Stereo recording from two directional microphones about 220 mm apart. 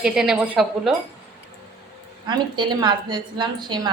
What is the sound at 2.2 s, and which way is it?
A woman's voice, 20° right (ahead or behind).